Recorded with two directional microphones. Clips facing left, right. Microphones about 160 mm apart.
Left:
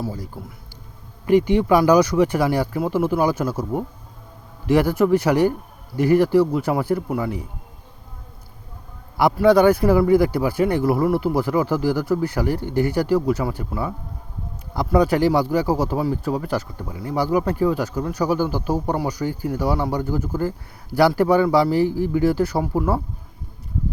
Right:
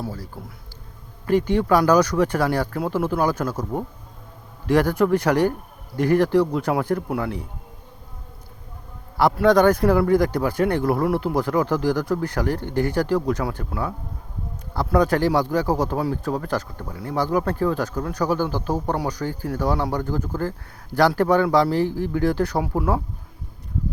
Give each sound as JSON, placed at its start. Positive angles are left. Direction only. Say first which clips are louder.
{"t": 0.0, "sound": "speech", "louder": "left 3 dB", "side_deg": 15}
{"t": 1.3, "sound": "speech", "louder": "left 3 dB", "side_deg": 10}
{"t": 9.3, "sound": "speech", "louder": "left 2 dB", "side_deg": 10}
{"t": 14.9, "sound": "speech", "louder": "left 2 dB", "side_deg": 10}